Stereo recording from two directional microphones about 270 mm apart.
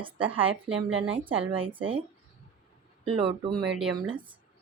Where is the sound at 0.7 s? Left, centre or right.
Right.